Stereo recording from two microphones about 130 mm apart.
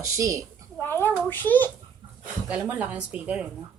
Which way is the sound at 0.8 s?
15° left (ahead or behind).